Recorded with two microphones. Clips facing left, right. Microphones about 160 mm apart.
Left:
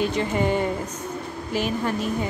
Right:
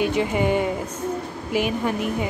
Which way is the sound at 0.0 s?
10° right (ahead or behind).